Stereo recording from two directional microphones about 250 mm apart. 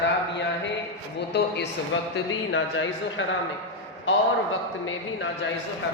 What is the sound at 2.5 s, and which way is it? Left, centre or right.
A man's voice, left.